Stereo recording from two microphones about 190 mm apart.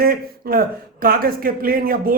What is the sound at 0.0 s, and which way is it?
A man's voice, 50° right (ahead or behind).